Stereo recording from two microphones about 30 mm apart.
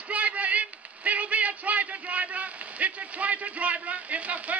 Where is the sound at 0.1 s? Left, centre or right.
Right.